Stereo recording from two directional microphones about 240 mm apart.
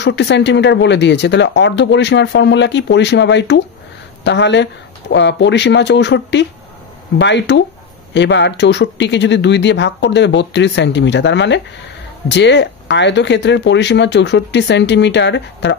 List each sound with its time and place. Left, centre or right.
0.0 s speech: left